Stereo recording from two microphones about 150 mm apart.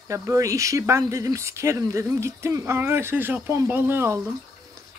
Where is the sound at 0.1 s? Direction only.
20° right (ahead or behind).